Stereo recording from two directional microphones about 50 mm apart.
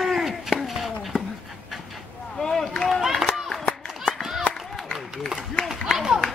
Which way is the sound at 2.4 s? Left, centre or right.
Centre.